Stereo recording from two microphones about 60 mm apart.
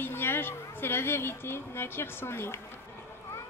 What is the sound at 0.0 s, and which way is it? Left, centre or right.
A woman's voice, left.